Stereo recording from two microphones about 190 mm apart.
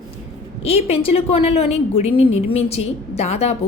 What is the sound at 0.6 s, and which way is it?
A woman's voice, 30° left (ahead or behind).